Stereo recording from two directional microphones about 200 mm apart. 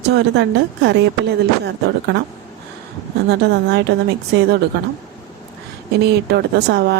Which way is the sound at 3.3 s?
55° right (ahead or behind).